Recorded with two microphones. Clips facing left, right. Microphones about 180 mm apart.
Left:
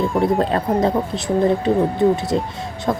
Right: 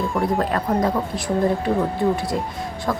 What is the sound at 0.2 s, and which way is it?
Speech, 25° left (ahead or behind).